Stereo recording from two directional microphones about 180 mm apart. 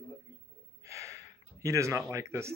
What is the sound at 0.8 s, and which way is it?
Gasp, 15° right (ahead or behind).